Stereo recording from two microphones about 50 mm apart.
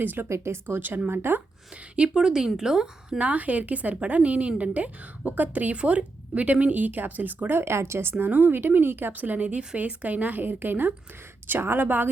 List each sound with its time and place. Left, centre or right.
0.0 s a woman's voice: right
0.3 s speech: right
0.8 s a woman's voice: right
2.0 s a woman's voice: centre
3.2 s a woman's voice: right
7.6 s speech: right
8.3 s a woman's voice: right
8.5 s a woman's voice: right